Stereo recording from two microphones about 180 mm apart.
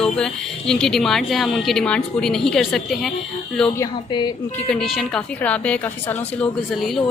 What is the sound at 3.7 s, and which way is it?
Speech, 20° left (ahead or behind).